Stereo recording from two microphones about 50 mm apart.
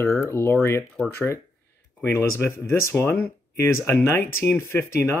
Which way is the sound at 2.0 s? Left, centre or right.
Left.